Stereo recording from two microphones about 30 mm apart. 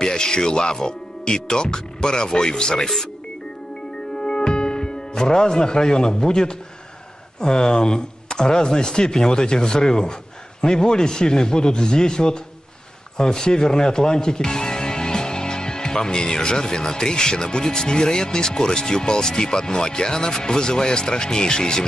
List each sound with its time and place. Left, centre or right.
0.0 s speech: left
4.2 s music: left
7.3 s speech: left